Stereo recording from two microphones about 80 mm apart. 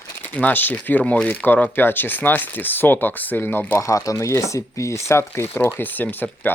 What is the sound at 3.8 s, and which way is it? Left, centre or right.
Speech, left.